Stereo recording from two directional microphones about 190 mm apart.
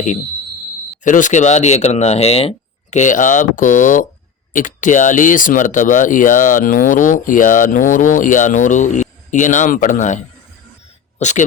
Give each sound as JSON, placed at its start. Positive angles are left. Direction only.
{"t": 1.0, "sound": "speech", "side_deg": 40}
{"t": 11.2, "sound": "speech", "side_deg": 40}